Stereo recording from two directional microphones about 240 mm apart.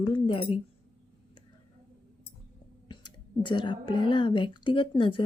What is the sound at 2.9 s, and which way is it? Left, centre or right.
A woman's voice, centre.